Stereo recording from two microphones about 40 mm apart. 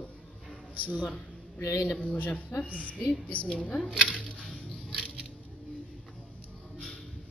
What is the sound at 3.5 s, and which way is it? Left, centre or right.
Speech, left.